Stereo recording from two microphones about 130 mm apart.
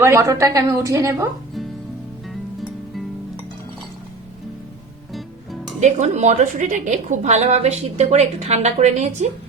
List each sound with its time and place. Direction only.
0.0 s a woman's voice: 20° right (ahead or behind)
5.1 s music: centre (ahead or behind)
5.8 s a woman's voice: 60° right (ahead or behind)